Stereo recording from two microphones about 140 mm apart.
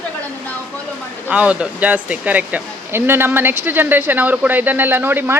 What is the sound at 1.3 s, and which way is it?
Speech, 10° right (ahead or behind).